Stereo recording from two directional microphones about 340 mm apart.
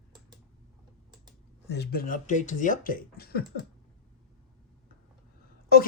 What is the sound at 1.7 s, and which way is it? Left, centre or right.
Speech, left.